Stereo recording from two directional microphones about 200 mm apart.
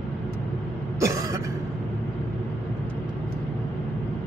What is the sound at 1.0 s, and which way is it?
Cough, 15° right (ahead or behind).